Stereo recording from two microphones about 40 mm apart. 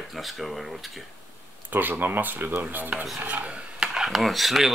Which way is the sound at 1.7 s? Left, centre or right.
Right.